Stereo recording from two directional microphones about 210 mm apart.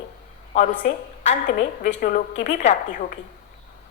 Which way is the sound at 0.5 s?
40° left (ahead or behind).